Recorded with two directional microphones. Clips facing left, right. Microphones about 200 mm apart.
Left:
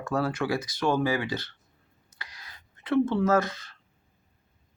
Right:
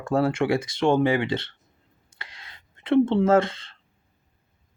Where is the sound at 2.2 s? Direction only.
25° right (ahead or behind).